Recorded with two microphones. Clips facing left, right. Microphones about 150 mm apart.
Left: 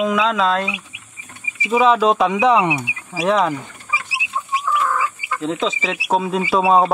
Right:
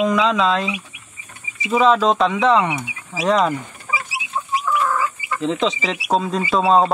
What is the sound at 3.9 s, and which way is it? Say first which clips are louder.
Rodents: right 1 dB; 55° right (ahead or behind).